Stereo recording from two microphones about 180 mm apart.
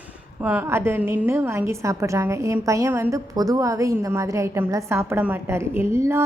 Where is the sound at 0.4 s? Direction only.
10° right (ahead or behind).